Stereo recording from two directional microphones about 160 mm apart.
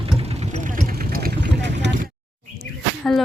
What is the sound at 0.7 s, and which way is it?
Vehicle, 65° right (ahead or behind).